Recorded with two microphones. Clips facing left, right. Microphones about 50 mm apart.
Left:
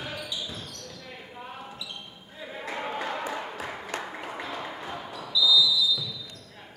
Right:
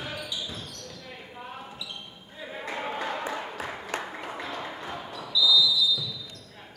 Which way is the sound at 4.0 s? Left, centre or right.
Centre.